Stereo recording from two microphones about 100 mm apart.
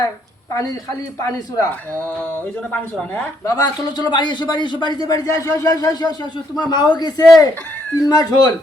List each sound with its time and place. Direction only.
1.2 s a man's voice: 30° left (ahead or behind)
2.7 s speech: 10° left (ahead or behind)
3.4 s a man's voice: 40° left (ahead or behind)